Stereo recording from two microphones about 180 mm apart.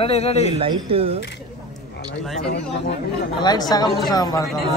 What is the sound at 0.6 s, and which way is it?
Speech, 30° right (ahead or behind).